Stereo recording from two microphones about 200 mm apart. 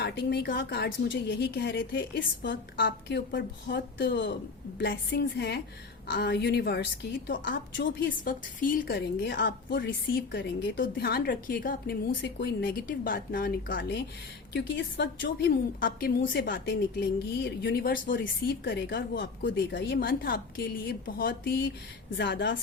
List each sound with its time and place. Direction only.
0.0 s a woman's voice: 55° left (ahead or behind)
7.3 s a woman's voice: 65° left (ahead or behind)
7.9 s a woman's voice: 45° left (ahead or behind)
9.2 s a woman's voice: 60° left (ahead or behind); by 13.5 s 45° left (ahead or behind)
13.7 s a woman's voice: 65° left (ahead or behind); by 16.1 s 45° left (ahead or behind)
16.2 s a woman's voice: 65° left (ahead or behind)
17.9 s a woman's voice: 45° left (ahead or behind)
18.6 s a woman's voice: 65° left (ahead or behind)